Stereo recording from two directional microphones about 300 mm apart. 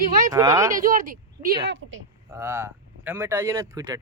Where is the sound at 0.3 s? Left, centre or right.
Centre.